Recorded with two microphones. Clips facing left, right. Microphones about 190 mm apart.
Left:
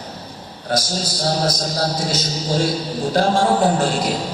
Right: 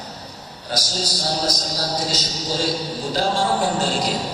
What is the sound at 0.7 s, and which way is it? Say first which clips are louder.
A man's voice: left 4 dB; 55° left (ahead or behind).